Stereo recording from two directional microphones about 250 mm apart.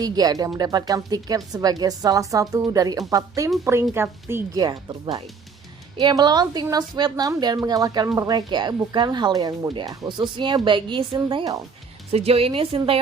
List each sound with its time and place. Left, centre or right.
0.0 s a woman's voice: centre